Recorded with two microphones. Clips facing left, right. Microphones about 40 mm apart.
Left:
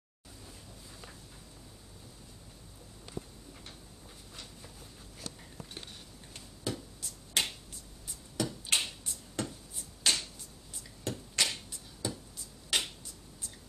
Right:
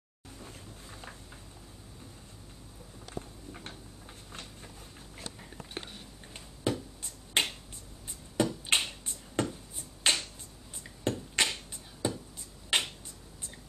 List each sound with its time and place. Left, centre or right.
0.4 s vehicle: right
5.9 s finger snapping: centre
10.8 s a sound: right
12.6 s finger snapping: right